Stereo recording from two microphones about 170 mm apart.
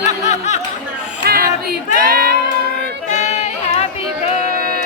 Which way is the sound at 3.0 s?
45° left (ahead or behind).